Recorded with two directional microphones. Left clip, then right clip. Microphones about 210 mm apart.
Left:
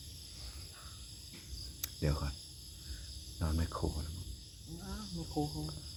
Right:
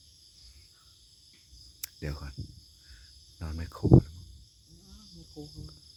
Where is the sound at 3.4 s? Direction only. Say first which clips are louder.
Left 4 dB; 20° right (ahead or behind).